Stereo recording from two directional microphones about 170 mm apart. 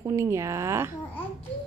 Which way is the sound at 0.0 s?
15° right (ahead or behind).